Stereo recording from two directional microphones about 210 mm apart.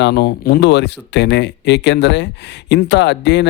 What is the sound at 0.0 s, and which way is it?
Speech, 50° left (ahead or behind).